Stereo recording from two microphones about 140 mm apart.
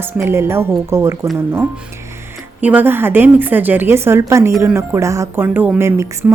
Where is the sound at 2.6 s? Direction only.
10° right (ahead or behind).